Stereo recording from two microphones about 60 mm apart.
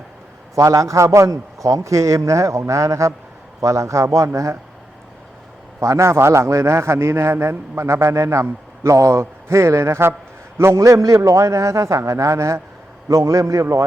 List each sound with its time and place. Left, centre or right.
0.5 s a man's voice: right
5.8 s a man's voice: right